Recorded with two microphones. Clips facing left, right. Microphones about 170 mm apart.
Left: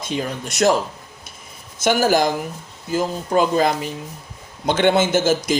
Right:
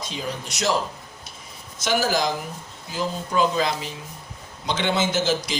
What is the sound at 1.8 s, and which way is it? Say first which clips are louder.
Speech: left 6 dB; 50° left (ahead or behind).